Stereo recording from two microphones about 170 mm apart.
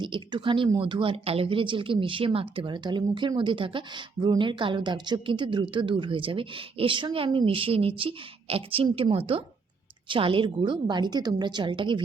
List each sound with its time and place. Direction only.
0.0 s a woman's voice: 30° right (ahead or behind)